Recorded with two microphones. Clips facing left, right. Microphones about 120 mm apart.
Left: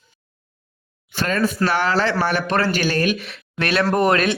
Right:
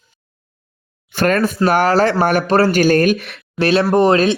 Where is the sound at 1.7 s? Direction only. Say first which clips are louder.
Right 6 dB; 45° right (ahead or behind); by 3.4 s 60° right (ahead or behind).